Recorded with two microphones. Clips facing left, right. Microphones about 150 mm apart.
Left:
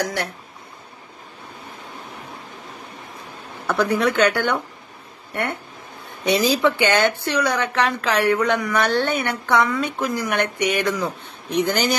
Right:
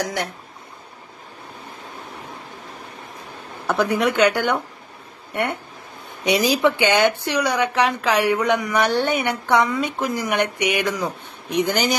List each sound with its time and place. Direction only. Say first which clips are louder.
3.6 s speech: even; 20° right (ahead or behind)